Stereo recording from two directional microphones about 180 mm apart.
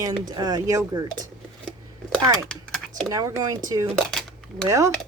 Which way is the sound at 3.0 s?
20° right (ahead or behind).